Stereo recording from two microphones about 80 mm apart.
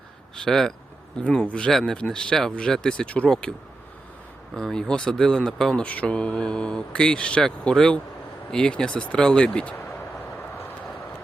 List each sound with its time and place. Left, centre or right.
0.3 s speech: centre
4.5 s speech: centre